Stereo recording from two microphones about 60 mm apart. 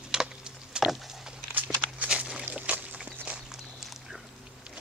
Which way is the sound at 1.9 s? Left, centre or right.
Centre.